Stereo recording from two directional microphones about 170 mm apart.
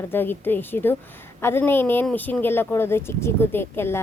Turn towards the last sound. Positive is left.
turn(degrees=15)  # may be behind; listen again after turning